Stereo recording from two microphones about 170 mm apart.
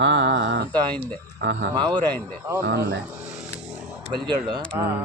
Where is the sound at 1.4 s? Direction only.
90° right.